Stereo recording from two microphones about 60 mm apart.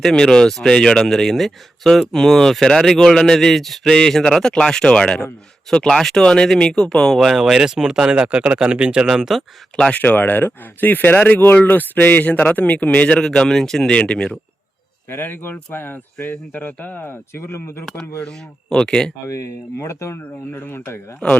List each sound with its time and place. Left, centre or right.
0.0 s speech: centre
9.0 s speech: centre
9.9 s speech: left
13.2 s speech: centre
13.9 s speech: centre
15.1 s speech: left
18.2 s speech: centre
19.8 s speech: left
20.2 s speech: left
21.2 s speech: centre